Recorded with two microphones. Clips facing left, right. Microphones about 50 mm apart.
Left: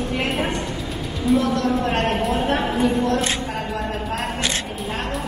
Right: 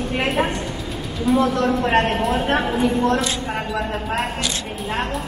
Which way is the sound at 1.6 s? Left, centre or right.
Right.